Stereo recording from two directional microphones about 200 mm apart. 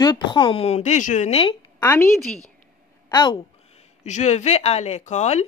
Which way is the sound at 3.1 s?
20° left (ahead or behind).